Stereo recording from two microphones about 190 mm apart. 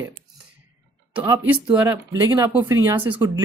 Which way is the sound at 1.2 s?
15° right (ahead or behind).